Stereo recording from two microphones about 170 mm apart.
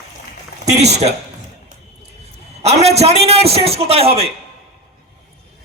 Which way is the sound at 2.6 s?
40° right (ahead or behind).